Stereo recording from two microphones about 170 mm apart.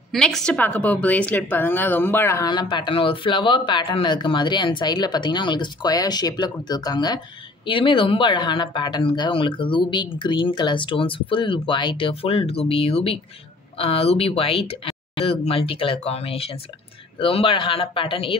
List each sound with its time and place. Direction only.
0.1 s a woman's voice: 5° left (ahead or behind); by 18.3 s 30° left (ahead or behind)